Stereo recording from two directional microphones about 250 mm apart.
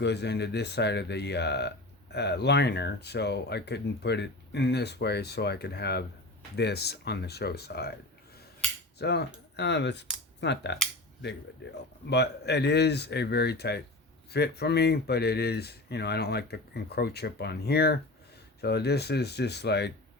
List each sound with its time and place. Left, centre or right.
0.0 s speech: left
9.0 s speech: left